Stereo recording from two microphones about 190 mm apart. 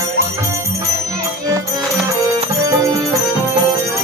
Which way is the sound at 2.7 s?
15° right (ahead or behind).